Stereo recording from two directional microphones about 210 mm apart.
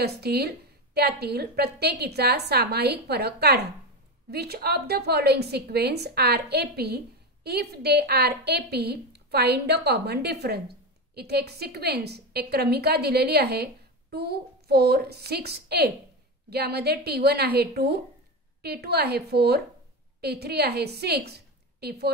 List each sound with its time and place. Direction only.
0.0 s a woman's voice: 50° right (ahead or behind)